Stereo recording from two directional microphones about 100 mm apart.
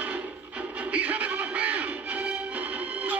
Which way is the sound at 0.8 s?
15° right (ahead or behind).